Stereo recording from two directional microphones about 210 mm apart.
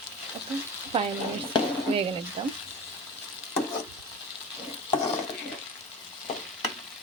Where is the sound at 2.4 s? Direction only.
25° right (ahead or behind).